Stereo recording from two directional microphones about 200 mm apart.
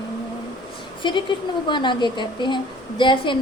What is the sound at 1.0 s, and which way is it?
A woman's voice, 25° left (ahead or behind).